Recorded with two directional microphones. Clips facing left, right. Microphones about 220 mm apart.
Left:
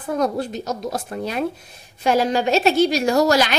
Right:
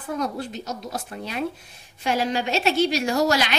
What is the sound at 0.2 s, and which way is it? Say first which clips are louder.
A woman's voice: left 6 dB; 40° left (ahead or behind).